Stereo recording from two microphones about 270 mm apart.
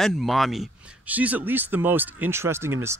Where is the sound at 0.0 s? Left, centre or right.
Centre.